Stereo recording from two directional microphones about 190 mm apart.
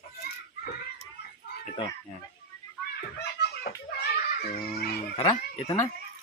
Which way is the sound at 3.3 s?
60° left (ahead or behind).